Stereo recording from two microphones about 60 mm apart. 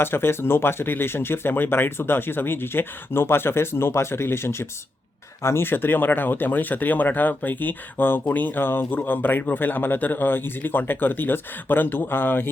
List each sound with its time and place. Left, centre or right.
0.0 s speech: left